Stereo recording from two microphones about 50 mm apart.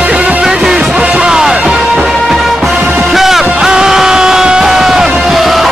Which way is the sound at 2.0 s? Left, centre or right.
Centre.